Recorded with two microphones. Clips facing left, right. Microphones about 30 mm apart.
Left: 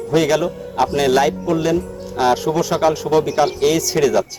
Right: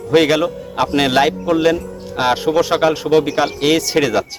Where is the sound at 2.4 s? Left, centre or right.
Right.